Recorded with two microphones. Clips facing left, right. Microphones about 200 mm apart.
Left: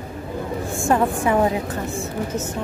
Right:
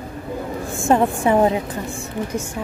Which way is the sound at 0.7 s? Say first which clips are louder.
Right 2 dB; 25° right (ahead or behind).